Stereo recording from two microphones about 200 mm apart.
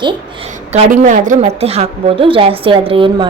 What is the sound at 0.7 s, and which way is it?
A woman's voice, 35° right (ahead or behind).